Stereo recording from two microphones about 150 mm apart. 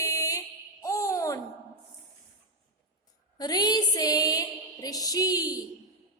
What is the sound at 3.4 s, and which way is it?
Music, 25° left (ahead or behind).